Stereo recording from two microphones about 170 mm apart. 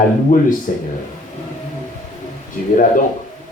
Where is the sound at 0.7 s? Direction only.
50° left (ahead or behind).